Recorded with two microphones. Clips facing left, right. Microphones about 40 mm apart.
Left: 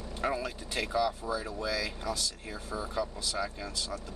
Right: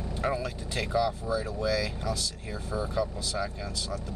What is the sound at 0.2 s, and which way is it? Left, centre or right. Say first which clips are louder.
Speech: right 1 dB; centre.